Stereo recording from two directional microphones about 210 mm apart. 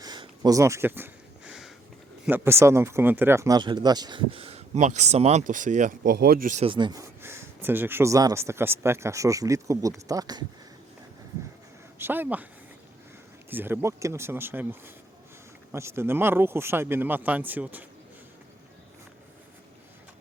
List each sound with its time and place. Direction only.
0.0 s a sound: 20° right (ahead or behind); by 1.7 s 5° right (ahead or behind)
2.2 s speech: 10° right (ahead or behind); by 6.7 s 40° right (ahead or behind)
6.7 s speech: 20° right (ahead or behind)
11.9 s speech: 10° right (ahead or behind)
13.5 s speech: 10° right (ahead or behind)